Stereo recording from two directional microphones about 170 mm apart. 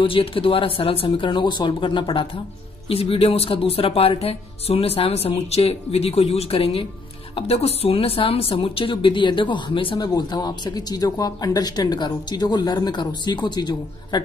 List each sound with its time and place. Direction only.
0.0 s a woman's voice: 30° left (ahead or behind)